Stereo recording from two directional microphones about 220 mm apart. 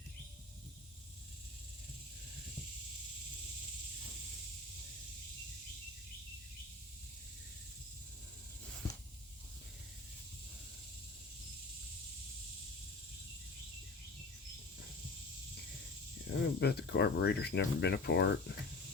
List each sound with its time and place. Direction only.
16.2 s speech: 50° left (ahead or behind)